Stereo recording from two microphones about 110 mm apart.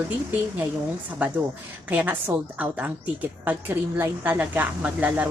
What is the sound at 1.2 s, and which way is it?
A woman's voice, 15° right (ahead or behind).